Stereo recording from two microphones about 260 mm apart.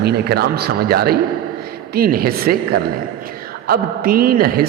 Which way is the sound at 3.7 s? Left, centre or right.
Right.